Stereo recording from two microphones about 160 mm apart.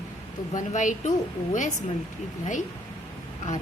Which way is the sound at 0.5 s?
50° left (ahead or behind).